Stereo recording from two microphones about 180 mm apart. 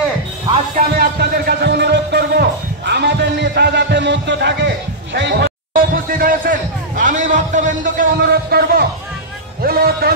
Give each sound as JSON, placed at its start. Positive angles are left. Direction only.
{"t": 0.7, "sound": "music", "side_deg": -60}
{"t": 5.7, "sound": "a sound", "side_deg": -50}
{"t": 7.0, "sound": "a man's voice", "side_deg": -45}